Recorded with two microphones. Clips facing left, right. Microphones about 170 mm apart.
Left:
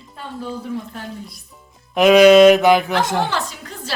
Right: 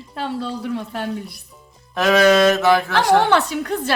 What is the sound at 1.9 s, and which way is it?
Mantra, 15° left (ahead or behind).